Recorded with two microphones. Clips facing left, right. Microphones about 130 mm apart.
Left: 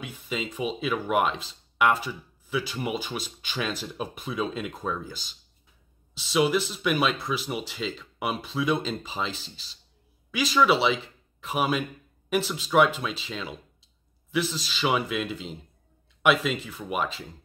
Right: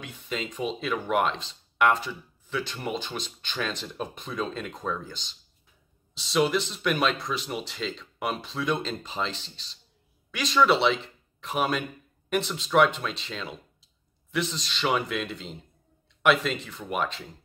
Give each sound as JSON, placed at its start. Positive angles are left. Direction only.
{"t": 0.0, "sound": "speech", "side_deg": 5}